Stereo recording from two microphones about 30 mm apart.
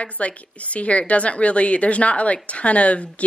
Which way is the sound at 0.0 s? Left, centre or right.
Left.